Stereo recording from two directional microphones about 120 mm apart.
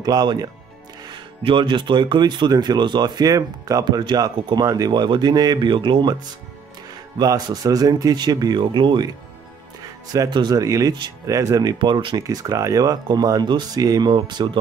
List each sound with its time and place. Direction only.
0.0 s speech: 35° right (ahead or behind)
7.2 s speech: 35° right (ahead or behind)
10.1 s speech: 35° right (ahead or behind)
12.2 s speech: 30° right (ahead or behind)